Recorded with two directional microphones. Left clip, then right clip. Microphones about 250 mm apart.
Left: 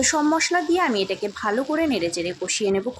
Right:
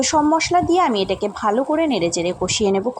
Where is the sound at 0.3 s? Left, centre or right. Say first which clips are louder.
Right 4 dB; centre.